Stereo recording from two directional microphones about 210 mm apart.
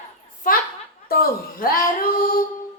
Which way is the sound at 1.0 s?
45° left (ahead or behind).